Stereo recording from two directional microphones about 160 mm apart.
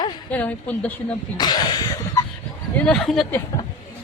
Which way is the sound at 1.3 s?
25° left (ahead or behind).